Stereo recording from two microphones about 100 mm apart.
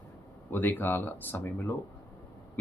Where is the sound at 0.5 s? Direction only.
20° left (ahead or behind).